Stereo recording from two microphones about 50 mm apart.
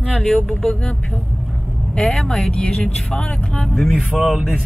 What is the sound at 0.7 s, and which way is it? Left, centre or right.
Vehicle, centre.